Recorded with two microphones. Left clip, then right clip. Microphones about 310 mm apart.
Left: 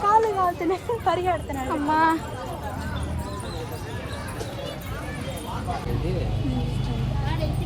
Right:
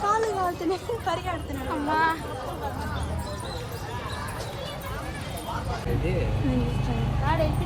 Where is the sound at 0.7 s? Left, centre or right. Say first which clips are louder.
Left 4 dB; centre.